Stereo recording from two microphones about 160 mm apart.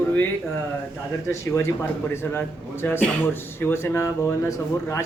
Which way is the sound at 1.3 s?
20° left (ahead or behind).